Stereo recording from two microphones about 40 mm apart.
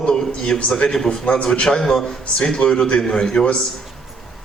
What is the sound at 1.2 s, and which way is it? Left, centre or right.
A man's voice, left.